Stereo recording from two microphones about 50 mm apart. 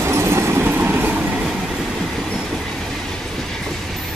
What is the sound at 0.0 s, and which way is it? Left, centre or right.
Train, right.